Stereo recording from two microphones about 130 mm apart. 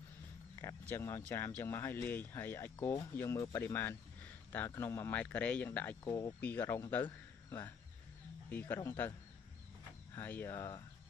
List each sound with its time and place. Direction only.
0.6 s speech: 15° left (ahead or behind)
6.0 s speech: 25° left (ahead or behind)
10.1 s speech: 15° left (ahead or behind)